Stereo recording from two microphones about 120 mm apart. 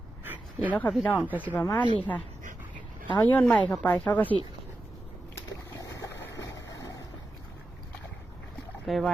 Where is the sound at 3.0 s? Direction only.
15° left (ahead or behind).